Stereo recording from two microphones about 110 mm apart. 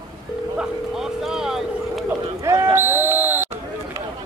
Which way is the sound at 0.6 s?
5° right (ahead or behind).